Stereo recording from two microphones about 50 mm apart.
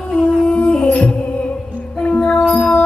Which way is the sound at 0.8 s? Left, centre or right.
Left.